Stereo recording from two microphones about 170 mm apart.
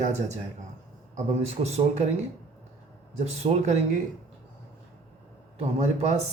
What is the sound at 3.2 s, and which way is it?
Speech, 40° right (ahead or behind).